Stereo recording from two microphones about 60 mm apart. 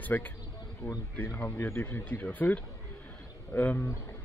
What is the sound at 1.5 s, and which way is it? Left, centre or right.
Speech, left.